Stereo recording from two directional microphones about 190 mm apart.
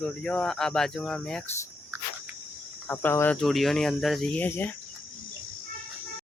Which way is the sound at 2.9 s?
10° left (ahead or behind).